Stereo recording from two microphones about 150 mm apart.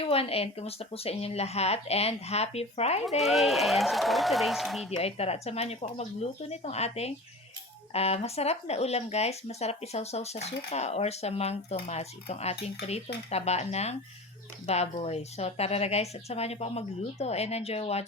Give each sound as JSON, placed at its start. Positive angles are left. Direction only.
{"t": 0.0, "sound": "speech", "side_deg": 40}
{"t": 3.2, "sound": "a man's voice", "side_deg": 0}
{"t": 4.9, "sound": "speech", "side_deg": 45}